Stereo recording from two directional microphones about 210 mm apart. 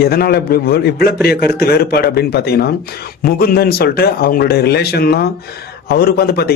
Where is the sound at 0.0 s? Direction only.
45° left (ahead or behind).